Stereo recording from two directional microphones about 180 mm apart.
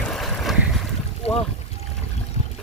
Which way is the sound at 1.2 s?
35° left (ahead or behind).